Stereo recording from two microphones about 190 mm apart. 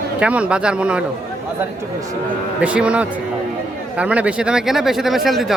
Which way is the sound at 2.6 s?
5° right (ahead or behind).